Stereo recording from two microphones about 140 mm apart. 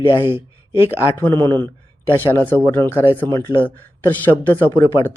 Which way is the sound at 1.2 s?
15° left (ahead or behind).